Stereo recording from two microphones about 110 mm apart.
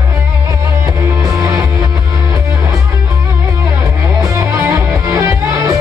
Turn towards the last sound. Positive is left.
turn(degrees=-30)  # may be behind; listen again after turning